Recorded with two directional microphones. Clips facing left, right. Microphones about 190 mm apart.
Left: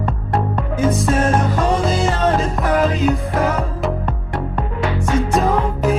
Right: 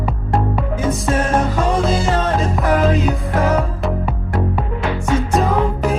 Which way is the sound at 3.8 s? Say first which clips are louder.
Even; 5° right (ahead or behind).